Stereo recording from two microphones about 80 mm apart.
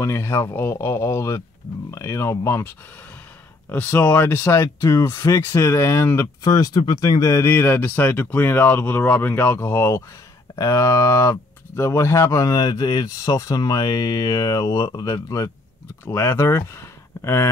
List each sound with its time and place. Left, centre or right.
0.0 s speech: left
3.7 s speech: left
6.4 s speech: left
16.1 s speech: left